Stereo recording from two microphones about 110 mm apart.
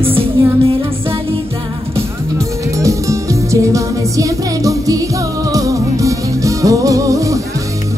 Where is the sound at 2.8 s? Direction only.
30° right (ahead or behind).